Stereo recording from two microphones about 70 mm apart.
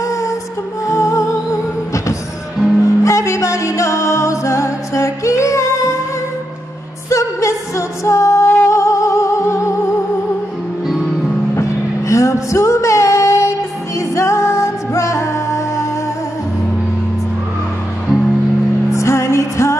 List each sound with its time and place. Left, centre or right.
0.0 s music: left
2.8 s music: left
7.1 s music: left
10.9 s music: centre
12.1 s female singing: left
13.9 s music: left
18.9 s music: left